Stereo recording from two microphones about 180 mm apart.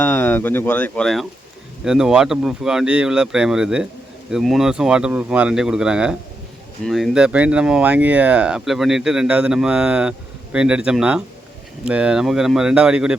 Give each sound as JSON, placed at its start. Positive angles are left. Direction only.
{"t": 0.0, "sound": "speech", "side_deg": 10}